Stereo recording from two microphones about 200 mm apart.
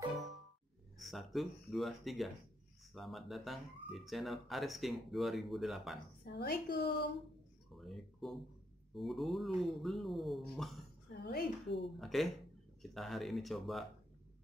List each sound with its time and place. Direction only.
0.9 s speech: centre (ahead or behind)
6.2 s speech: 55° left (ahead or behind)
7.7 s a sound: centre (ahead or behind)
8.9 s speech: centre (ahead or behind)
11.1 s speech: 55° left (ahead or behind)
12.0 s speech: centre (ahead or behind)